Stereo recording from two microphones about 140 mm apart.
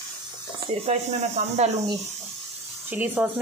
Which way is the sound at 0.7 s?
50° right (ahead or behind).